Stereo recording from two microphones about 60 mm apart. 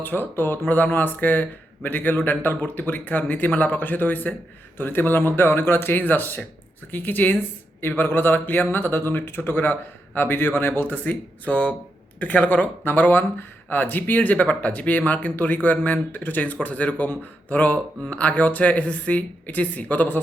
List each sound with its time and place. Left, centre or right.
0.0 s speech: left